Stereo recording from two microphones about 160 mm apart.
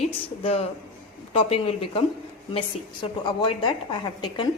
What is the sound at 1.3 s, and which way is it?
Speech, 35° left (ahead or behind).